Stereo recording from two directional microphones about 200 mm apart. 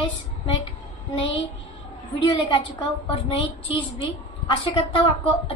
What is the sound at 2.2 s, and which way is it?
A woman's voice, 25° left (ahead or behind).